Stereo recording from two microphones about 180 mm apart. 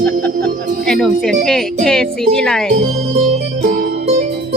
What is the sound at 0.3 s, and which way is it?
Music, 60° right (ahead or behind).